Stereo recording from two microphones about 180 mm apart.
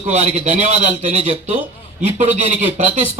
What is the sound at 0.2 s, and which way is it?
Speech, 40° right (ahead or behind).